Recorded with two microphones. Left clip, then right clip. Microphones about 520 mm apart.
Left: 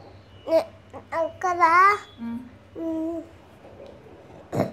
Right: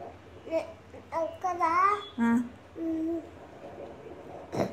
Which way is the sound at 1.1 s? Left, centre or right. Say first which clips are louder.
Left 6 dB; left.